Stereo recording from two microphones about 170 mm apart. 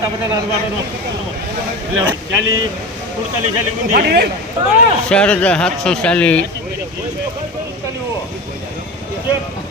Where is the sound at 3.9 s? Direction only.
70° right (ahead or behind).